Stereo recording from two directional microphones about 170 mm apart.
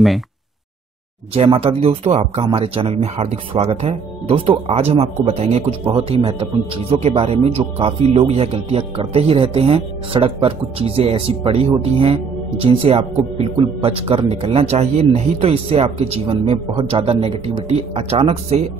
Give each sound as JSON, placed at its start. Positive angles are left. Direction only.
{"t": 1.3, "sound": "speech", "side_deg": -35}